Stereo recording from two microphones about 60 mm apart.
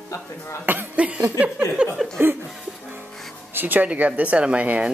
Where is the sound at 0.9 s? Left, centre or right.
Right.